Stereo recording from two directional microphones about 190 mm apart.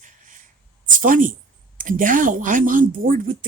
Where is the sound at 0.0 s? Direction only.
40° right (ahead or behind).